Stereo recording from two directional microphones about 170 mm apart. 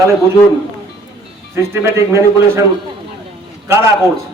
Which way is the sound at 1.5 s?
15° right (ahead or behind).